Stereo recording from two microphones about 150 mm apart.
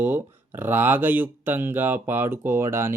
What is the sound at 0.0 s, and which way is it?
Speech, 15° right (ahead or behind).